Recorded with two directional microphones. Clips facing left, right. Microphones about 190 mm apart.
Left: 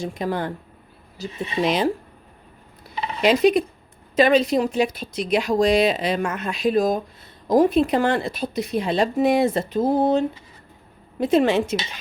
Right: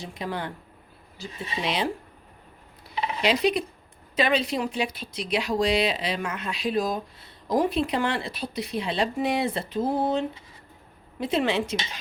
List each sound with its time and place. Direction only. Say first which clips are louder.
0.0 s speech: left 7 dB; 45° left (ahead or behind)
3.2 s speech: left 7 dB; 50° left (ahead or behind)